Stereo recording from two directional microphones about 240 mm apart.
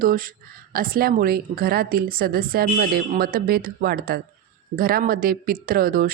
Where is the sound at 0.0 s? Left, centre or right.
Right.